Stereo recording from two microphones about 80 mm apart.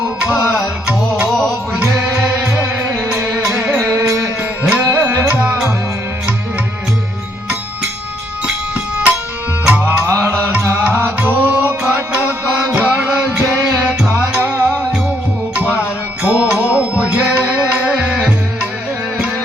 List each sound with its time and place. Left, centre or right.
1.4 s music: centre
2.0 s music: centre
5.2 s music: centre
8.4 s music: centre
10.1 s music: right; by 18.7 s centre